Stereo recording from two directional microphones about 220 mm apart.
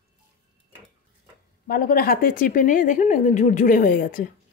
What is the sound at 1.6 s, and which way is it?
A woman's voice, 40° left (ahead or behind).